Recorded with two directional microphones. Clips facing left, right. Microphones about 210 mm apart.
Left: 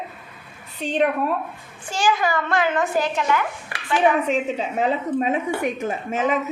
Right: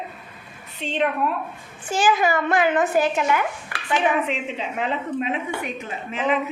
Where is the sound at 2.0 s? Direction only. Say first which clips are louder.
Right 1 dB; 20° right (ahead or behind).